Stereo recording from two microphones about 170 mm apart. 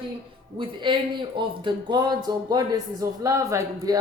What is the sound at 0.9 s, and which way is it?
Speech, 30° right (ahead or behind).